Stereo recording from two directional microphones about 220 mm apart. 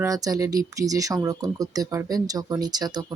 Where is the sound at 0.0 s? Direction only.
15° right (ahead or behind).